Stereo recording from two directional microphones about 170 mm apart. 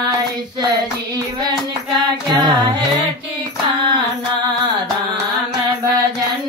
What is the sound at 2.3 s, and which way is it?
Music, 25° right (ahead or behind).